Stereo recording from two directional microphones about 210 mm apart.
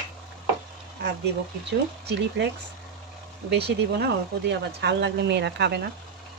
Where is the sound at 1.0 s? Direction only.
55° right (ahead or behind).